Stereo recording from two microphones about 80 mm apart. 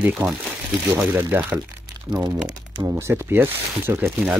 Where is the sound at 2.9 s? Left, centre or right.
Right.